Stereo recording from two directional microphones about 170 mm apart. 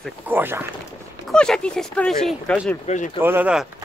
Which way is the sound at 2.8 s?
45° left (ahead or behind).